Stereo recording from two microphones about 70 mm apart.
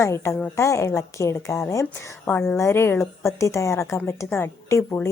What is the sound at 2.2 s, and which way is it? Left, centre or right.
A woman's voice, left.